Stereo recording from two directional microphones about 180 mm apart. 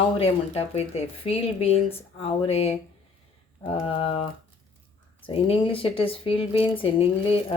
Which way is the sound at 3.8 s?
30° left (ahead or behind).